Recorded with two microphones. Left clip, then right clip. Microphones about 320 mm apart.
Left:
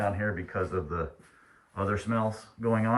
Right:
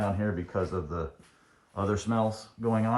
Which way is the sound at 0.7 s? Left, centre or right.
Centre.